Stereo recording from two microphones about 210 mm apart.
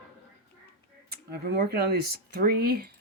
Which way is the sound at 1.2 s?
50° right (ahead or behind).